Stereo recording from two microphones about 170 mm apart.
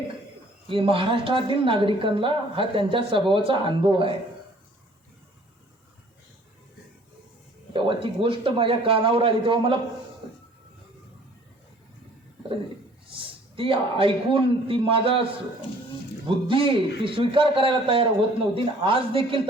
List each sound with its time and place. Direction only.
0.7 s a woman's voice: 30° right (ahead or behind)
7.7 s a woman's voice: 30° right (ahead or behind)
13.1 s a man's voice: 30° right (ahead or behind)